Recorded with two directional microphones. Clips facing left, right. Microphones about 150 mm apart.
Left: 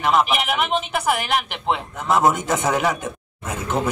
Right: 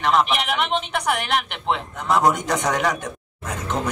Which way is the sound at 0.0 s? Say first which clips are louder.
Left 1 dB; 5° left (ahead or behind).